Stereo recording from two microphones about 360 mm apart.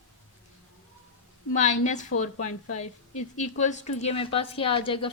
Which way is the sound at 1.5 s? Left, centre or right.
Centre.